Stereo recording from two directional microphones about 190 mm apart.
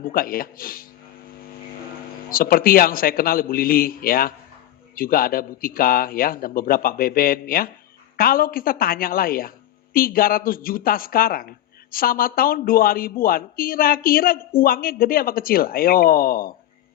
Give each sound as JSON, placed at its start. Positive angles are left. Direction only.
{"t": 0.0, "sound": "speech", "side_deg": 50}
{"t": 2.3, "sound": "speech", "side_deg": 50}